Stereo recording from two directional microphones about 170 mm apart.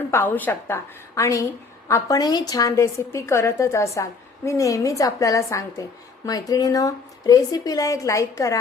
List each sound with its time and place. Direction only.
0.1 s a woman's voice: 10° left (ahead or behind)